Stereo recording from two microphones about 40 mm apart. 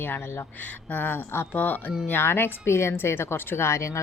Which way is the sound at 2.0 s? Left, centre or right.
Left.